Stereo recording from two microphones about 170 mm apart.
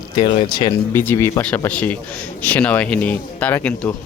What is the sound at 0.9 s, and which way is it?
Speech, 15° left (ahead or behind).